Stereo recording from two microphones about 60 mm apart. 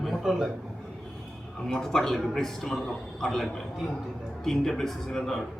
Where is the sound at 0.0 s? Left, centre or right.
Centre.